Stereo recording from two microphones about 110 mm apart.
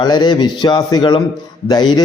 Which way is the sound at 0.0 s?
40° left (ahead or behind).